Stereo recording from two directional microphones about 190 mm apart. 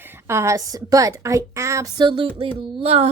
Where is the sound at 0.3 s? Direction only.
15° right (ahead or behind).